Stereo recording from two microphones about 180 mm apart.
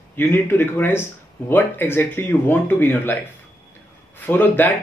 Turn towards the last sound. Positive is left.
turn(degrees=10)  # may be behind; listen again after turning